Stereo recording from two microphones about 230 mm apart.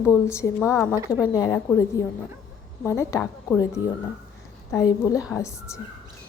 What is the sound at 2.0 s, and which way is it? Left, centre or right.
Speech, centre.